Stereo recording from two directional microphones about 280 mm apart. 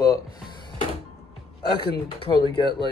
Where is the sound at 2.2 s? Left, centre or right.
Centre.